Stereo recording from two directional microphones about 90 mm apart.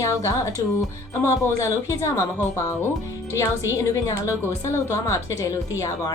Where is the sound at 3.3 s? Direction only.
35° left (ahead or behind).